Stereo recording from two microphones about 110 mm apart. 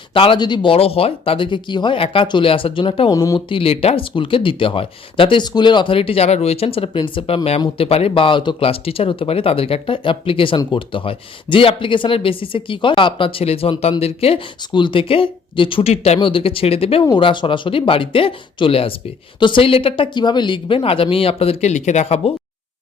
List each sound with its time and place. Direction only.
0.1 s speech: 55° left (ahead or behind)
3.1 s speech: 30° left (ahead or behind)
3.5 s speech: 60° left (ahead or behind)
14.7 s speech: 45° left (ahead or behind); by 22.3 s 70° left (ahead or behind)